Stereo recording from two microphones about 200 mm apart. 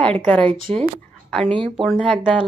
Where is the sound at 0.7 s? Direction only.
30° right (ahead or behind).